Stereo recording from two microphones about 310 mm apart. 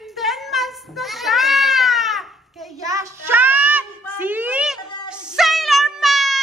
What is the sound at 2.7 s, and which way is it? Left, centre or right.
Child singing, centre.